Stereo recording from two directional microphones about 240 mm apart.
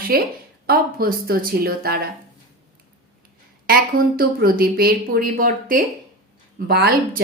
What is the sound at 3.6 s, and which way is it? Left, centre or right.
Speech, right.